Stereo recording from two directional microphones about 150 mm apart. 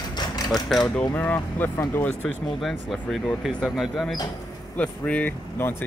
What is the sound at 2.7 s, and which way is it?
Speech, centre (ahead or behind).